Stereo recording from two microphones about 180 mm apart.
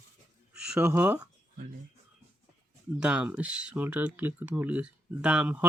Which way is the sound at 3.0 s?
5° right (ahead or behind).